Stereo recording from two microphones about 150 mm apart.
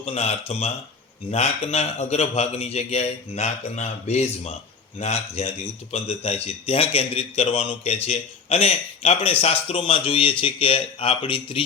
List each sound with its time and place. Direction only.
0.0 s a man's voice: 40° left (ahead or behind)